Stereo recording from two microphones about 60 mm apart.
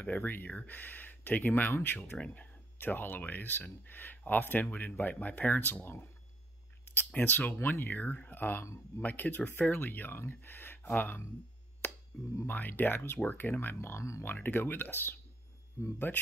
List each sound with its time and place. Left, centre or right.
0.0 s speech: left
2.1 s speech: left
7.2 s speech: left
12.1 s speech: left
12.4 s speech: left
13.7 s speech: left
14.2 s speech: left